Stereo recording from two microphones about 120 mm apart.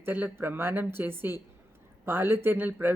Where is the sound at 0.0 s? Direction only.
15° right (ahead or behind).